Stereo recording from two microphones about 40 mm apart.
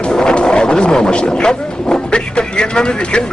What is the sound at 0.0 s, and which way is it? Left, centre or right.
Speech, left.